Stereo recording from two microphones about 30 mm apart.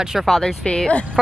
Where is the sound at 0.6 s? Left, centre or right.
Left.